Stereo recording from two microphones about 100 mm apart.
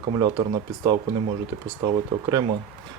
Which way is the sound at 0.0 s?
40° right (ahead or behind).